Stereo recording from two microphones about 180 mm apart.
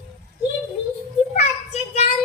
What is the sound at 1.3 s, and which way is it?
Child singing, 40° left (ahead or behind).